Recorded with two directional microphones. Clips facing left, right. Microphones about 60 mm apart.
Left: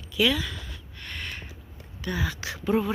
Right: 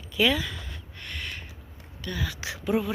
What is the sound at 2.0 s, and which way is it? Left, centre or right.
Speech, centre.